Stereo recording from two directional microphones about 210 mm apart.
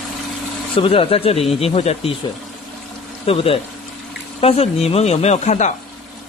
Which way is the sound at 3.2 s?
25° left (ahead or behind).